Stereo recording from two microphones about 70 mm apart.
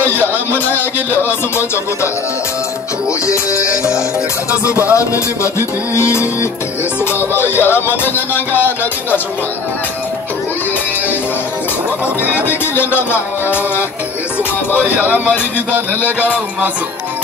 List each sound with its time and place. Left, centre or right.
0.1 s a sound: left
3.1 s speech: left
3.5 s speech: right
4.9 s speech: left
5.9 s music: left
12.4 s music: left
14.8 s speech: right